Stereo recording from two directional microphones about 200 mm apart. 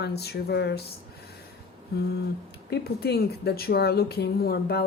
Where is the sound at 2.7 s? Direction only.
55° left (ahead or behind).